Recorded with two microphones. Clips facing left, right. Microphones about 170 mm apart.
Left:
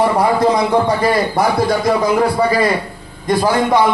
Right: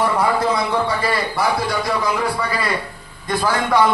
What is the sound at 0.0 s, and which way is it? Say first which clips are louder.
A man's voice: left 5 dB; 40° left (ahead or behind).